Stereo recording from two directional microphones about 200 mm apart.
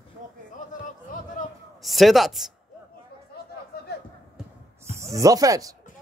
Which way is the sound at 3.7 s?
50° left (ahead or behind).